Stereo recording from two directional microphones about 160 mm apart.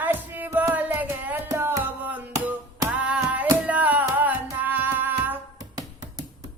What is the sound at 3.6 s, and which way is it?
Music, 10° right (ahead or behind).